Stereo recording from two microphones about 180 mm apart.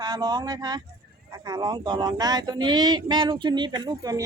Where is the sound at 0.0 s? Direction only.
25° right (ahead or behind).